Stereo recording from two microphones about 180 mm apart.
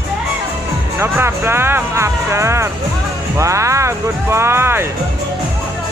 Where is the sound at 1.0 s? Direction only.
15° right (ahead or behind).